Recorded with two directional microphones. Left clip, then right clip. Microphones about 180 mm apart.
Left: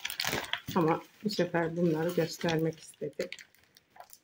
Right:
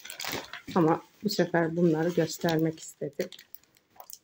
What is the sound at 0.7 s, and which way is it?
Speech, 30° right (ahead or behind).